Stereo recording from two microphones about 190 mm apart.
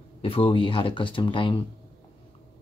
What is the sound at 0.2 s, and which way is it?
Speech, 30° left (ahead or behind).